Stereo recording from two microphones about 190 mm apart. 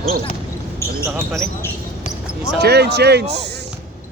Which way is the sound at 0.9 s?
15° right (ahead or behind).